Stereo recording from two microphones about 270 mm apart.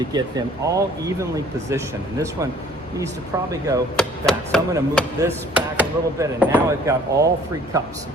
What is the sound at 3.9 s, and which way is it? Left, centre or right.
Chopping, centre.